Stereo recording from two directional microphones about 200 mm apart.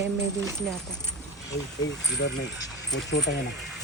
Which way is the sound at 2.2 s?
55° left (ahead or behind).